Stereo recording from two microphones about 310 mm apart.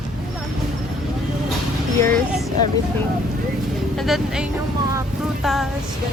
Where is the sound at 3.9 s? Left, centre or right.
Centre.